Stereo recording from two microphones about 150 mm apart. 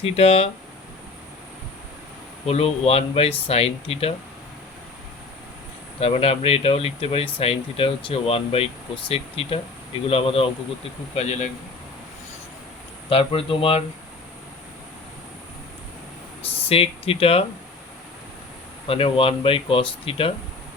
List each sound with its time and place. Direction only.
0.0 s speech: 40° left (ahead or behind)
2.5 s speech: 40° left (ahead or behind)
6.0 s speech: 40° left (ahead or behind)
11.1 s speech: 50° left (ahead or behind)
13.1 s speech: 40° left (ahead or behind)
16.5 s speech: 40° left (ahead or behind)
18.9 s speech: 40° left (ahead or behind)